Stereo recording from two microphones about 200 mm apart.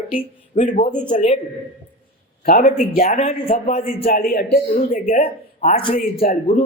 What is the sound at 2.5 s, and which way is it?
Speech, 45° left (ahead or behind).